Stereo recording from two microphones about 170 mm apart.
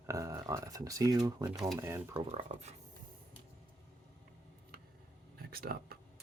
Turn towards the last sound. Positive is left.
turn(degrees=-60)  # may be behind; listen again after turning